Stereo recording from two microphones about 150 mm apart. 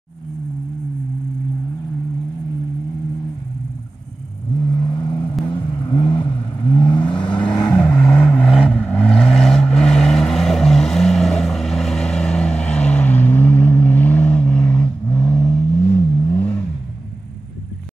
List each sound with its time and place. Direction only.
4.6 s vehicle: 30° left (ahead or behind)
7.8 s vehicle: 10° left (ahead or behind)